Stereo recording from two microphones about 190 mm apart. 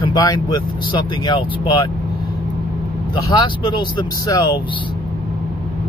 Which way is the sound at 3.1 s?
25° left (ahead or behind).